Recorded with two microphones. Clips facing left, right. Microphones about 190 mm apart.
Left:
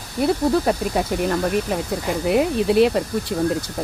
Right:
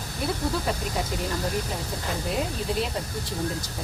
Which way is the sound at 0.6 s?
65° left (ahead or behind).